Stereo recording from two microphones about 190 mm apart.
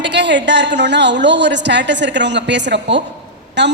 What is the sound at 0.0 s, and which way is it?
A woman's voice, 65° right (ahead or behind).